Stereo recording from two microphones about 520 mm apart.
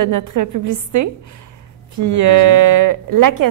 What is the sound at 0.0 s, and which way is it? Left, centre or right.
A woman's voice, right.